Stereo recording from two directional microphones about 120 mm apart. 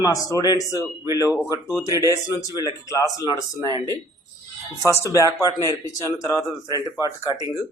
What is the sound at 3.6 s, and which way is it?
Speech, 35° right (ahead or behind).